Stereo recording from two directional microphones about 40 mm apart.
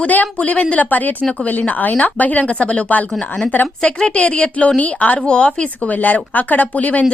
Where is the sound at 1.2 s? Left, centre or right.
Left.